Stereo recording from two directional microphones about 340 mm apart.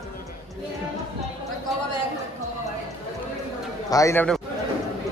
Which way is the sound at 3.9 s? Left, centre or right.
Centre.